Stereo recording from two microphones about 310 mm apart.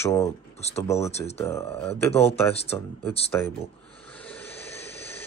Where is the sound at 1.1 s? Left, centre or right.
Centre.